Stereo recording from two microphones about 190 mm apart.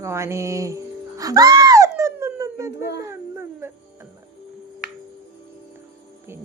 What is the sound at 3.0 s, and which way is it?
Dog, 15° right (ahead or behind).